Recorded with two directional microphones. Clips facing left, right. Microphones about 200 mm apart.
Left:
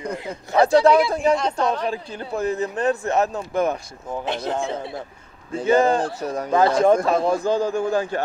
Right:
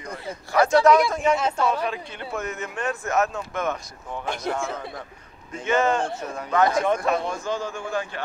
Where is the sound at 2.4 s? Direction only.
35° left (ahead or behind).